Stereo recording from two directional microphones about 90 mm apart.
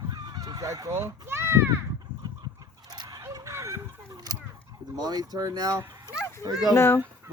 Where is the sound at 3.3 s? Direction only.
35° right (ahead or behind).